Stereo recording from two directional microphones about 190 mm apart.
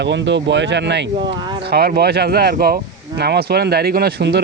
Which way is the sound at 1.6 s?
55° right (ahead or behind).